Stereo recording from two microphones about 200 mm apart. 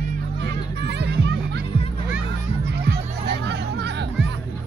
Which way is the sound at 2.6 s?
55° right (ahead or behind).